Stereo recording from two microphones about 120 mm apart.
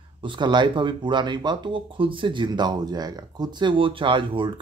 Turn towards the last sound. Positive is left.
turn(degrees=-45)  # may be behind; listen again after turning